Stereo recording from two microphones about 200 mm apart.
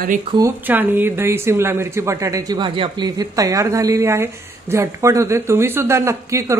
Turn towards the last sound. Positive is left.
turn(degrees=-15)  # may be behind; listen again after turning